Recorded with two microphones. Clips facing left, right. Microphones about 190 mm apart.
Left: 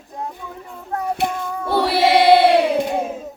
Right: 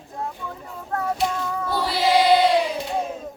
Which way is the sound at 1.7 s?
65° left (ahead or behind).